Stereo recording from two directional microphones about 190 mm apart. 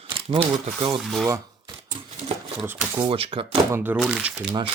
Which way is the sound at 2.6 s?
10° right (ahead or behind).